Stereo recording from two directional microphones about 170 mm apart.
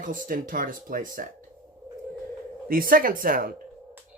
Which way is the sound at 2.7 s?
55° right (ahead or behind).